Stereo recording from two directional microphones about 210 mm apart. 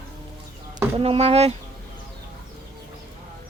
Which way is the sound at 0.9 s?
25° right (ahead or behind).